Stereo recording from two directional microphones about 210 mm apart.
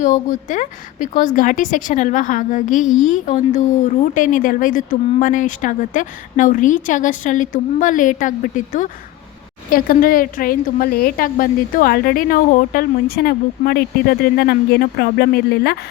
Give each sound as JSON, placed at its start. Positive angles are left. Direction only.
{"t": 0.0, "sound": "a woman's voice", "side_deg": 35}